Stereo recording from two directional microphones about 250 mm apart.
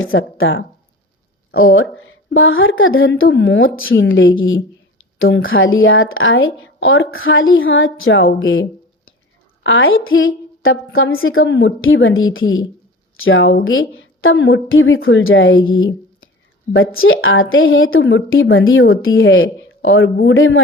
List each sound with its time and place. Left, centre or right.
0.0 s speech: left
9.6 s speech: left
17.0 s speech: left